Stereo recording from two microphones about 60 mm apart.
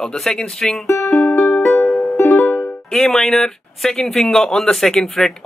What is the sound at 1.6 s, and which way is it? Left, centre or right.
Music, left.